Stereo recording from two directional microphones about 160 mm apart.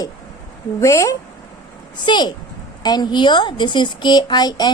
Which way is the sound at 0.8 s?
20° left (ahead or behind).